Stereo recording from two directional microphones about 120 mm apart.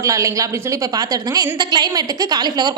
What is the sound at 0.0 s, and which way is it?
A woman's voice, 25° right (ahead or behind).